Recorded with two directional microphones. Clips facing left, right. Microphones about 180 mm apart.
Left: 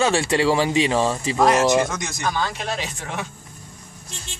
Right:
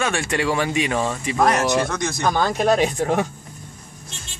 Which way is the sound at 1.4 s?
15° left (ahead or behind).